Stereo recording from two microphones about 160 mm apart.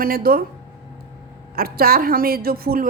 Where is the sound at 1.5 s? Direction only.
70° right (ahead or behind).